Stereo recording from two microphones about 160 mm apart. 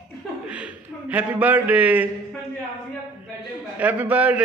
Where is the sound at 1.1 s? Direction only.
10° right (ahead or behind).